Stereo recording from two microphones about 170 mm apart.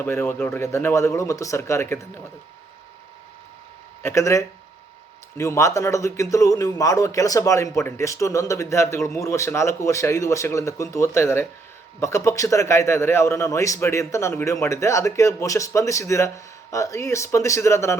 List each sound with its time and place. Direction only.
0.0 s a man's voice: 15° left (ahead or behind)
4.0 s a man's voice: 15° left (ahead or behind)